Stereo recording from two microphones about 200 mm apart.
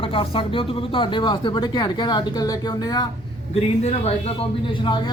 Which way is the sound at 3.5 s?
30° left (ahead or behind).